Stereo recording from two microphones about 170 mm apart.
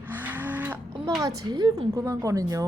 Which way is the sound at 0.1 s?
10° right (ahead or behind).